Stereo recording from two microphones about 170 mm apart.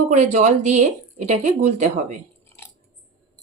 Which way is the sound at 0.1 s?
40° right (ahead or behind).